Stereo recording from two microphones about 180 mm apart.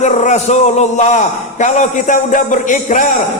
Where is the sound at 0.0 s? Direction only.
40° left (ahead or behind).